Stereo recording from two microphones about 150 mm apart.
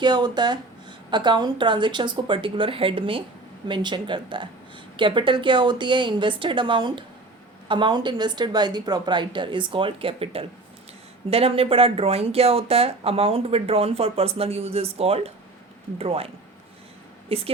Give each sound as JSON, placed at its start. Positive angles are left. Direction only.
{"t": 0.0, "sound": "speech", "side_deg": -30}